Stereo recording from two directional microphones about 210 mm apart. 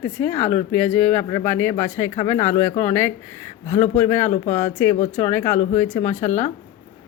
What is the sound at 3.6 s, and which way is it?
Speech, 35° left (ahead or behind).